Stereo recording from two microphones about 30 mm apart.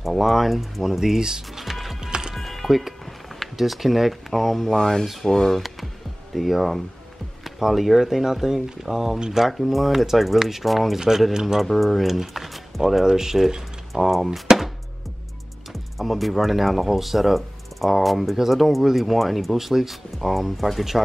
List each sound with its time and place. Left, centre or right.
0.0 s speech: centre
1.5 s music: centre
2.0 s music: right
2.3 s music: centre
3.5 s speech: centre
4.7 s speech: centre
6.3 s speech: centre
11.0 s speech: centre
11.6 s speech: centre
13.0 s speech: centre
14.1 s speech: centre
15.7 s speech: centre
20.2 s speech: centre